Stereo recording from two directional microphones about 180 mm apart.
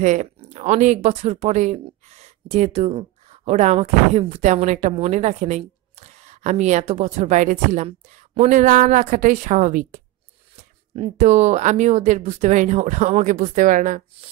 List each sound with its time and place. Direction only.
0.0 s a woman's voice: 40° right (ahead or behind)